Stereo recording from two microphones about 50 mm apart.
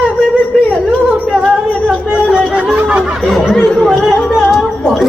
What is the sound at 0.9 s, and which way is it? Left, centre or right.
Music, centre.